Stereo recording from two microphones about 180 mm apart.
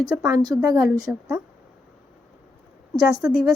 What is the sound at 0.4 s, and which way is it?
Speech, 20° right (ahead or behind).